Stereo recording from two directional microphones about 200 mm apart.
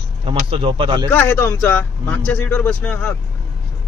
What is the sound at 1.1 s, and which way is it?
Speech, 10° left (ahead or behind).